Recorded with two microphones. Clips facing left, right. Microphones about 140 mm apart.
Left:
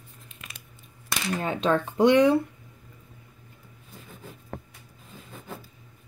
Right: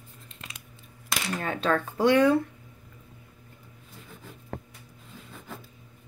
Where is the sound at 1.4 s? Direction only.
20° left (ahead or behind).